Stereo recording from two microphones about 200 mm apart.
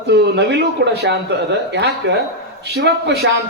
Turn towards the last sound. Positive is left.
turn(degrees=-60)  # may be behind; listen again after turning